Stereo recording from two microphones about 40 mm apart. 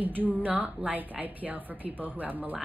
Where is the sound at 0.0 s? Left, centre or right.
Right.